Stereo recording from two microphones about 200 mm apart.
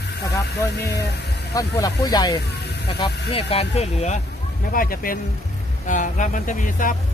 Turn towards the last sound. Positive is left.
turn(degrees=40)  # may be behind; listen again after turning